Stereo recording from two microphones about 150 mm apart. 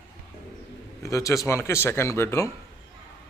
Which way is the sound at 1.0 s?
20° left (ahead or behind).